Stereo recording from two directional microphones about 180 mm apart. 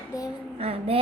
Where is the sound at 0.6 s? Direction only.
35° right (ahead or behind).